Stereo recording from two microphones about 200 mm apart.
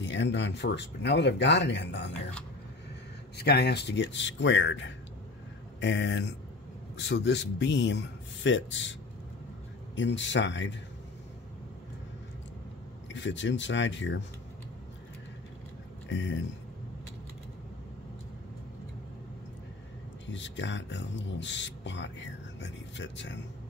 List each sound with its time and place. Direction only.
0.0 s speech: 65° left (ahead or behind)
3.3 s speech: 55° left (ahead or behind)
9.9 s speech: 65° left (ahead or behind)
13.1 s speech: 65° left (ahead or behind)
16.1 s speech: 65° left (ahead or behind)
20.2 s speech: 65° left (ahead or behind)